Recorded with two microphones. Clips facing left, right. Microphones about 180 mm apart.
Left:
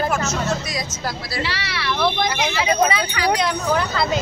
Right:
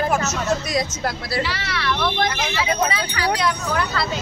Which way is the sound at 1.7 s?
10° left (ahead or behind).